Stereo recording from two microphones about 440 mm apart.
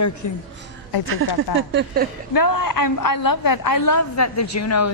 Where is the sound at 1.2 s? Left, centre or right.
Right.